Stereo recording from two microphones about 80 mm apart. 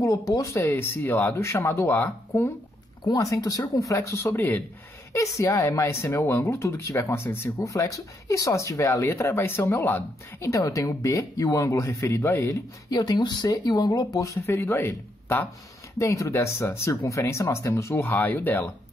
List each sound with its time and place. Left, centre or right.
0.0 s speech: left
0.7 s speech: left
3.1 s speech: left
5.1 s speech: left
7.5 s speech: left
10.4 s speech: left
12.9 s speech: left
13.5 s speech: left
16.0 s speech: left
18.0 s speech: left